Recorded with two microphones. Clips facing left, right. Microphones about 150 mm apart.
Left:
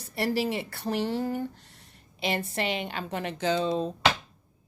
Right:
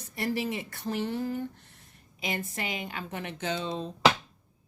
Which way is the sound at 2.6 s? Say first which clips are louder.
Left 5 dB; 70° left (ahead or behind).